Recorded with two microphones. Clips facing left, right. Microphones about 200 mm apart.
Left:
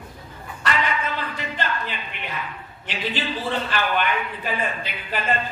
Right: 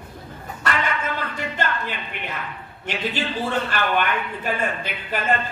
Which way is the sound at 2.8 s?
50° right (ahead or behind).